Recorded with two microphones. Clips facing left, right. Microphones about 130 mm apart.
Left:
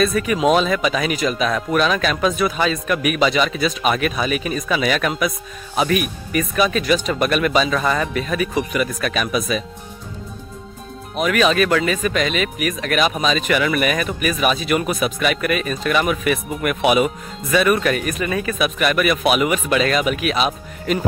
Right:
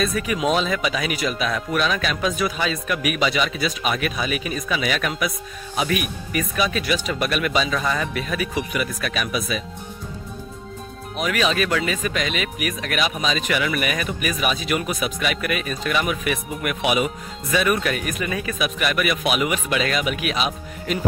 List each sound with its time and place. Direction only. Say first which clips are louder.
0.0 s speech: left 5 dB; 55° left (ahead or behind)
11.1 s speech: left 5 dB; 50° left (ahead or behind)